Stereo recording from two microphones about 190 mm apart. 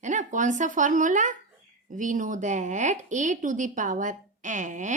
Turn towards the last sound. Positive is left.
turn(degrees=-40)  # may be behind; listen again after turning